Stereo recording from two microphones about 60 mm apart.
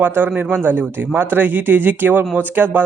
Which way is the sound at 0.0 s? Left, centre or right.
Right.